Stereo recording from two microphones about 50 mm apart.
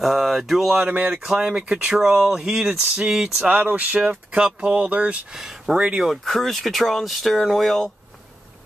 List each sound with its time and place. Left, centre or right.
0.0 s speech: centre
0.8 s speech: right
1.1 s speech: centre
3.4 s speech: right
5.3 s speech: centre
6.2 s speech: centre